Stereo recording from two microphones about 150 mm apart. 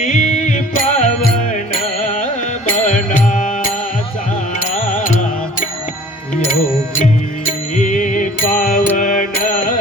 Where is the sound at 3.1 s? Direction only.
60° left (ahead or behind).